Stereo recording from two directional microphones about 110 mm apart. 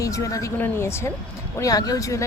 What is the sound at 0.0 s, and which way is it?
Speech, 30° left (ahead or behind).